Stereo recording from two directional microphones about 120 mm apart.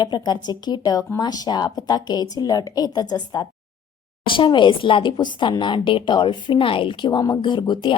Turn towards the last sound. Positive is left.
turn(degrees=40)  # may be behind; listen again after turning